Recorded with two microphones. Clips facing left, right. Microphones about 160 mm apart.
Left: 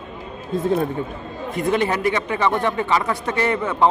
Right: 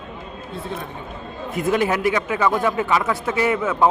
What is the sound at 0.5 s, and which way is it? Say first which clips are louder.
Speech: left 11 dB; 45° left (ahead or behind).